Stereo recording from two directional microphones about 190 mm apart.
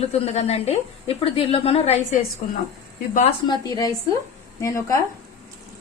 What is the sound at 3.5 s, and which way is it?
A woman's voice, 20° left (ahead or behind).